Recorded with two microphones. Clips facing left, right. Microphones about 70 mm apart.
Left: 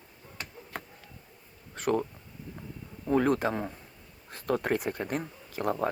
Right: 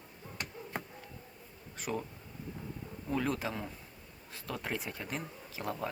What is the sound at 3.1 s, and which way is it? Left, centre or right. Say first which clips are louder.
Speech: left 9 dB; left.